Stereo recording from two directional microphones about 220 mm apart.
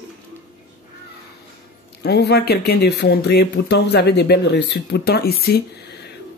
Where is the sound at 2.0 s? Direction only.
50° left (ahead or behind).